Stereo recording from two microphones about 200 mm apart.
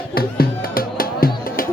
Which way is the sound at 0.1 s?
50° left (ahead or behind).